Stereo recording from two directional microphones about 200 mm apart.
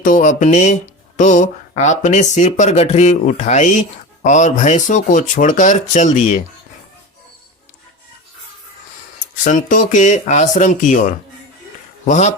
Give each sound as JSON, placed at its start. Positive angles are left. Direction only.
{"t": 0.0, "sound": "speech", "side_deg": 40}
{"t": 9.4, "sound": "speech", "side_deg": 40}